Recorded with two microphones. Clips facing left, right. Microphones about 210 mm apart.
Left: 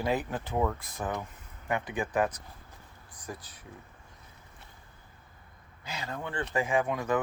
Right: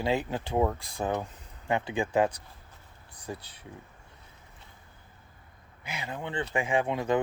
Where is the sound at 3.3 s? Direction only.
25° right (ahead or behind).